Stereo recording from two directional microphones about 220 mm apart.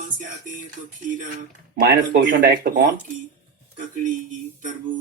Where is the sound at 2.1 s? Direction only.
50° right (ahead or behind).